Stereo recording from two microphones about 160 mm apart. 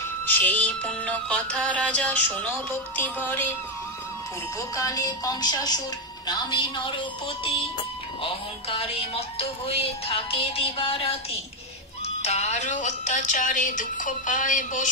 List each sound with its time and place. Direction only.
0.3 s music: 10° left (ahead or behind)
4.6 s speech: 20° left (ahead or behind)
7.4 s music: 35° left (ahead or behind)
12.2 s speech: 45° left (ahead or behind)